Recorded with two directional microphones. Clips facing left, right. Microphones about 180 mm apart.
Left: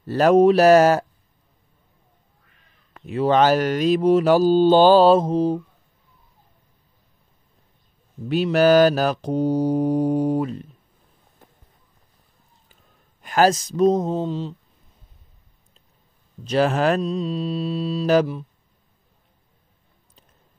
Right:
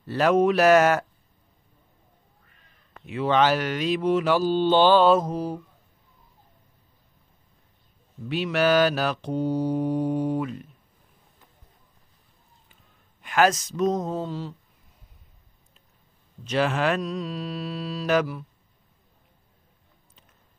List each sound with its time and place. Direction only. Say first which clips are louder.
0.0 s speech: left 6 dB; 40° left (ahead or behind)
3.1 s speech: left 4 dB; 40° left (ahead or behind)
8.3 s speech: left 6 dB; 40° left (ahead or behind)
13.2 s speech: left 3 dB; 35° left (ahead or behind); by 14.5 s 20° left (ahead or behind)
16.4 s speech: left 5 dB; 40° left (ahead or behind)
17.0 s mantra: left 6 dB; 25° left (ahead or behind)